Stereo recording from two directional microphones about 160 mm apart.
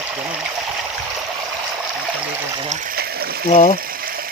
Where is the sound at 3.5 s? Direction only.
45° left (ahead or behind).